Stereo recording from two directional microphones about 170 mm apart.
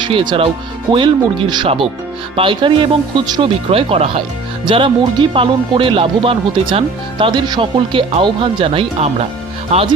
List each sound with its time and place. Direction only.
0.0 s speech: 30° right (ahead or behind)